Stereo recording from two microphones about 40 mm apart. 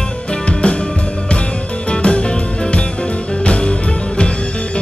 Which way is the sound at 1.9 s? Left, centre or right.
Left.